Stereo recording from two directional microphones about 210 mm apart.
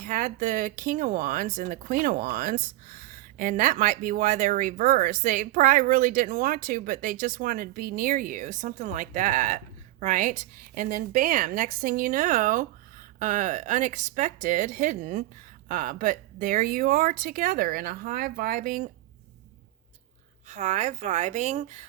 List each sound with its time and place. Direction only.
0.0 s speech: 40° right (ahead or behind)
20.5 s speech: 35° right (ahead or behind)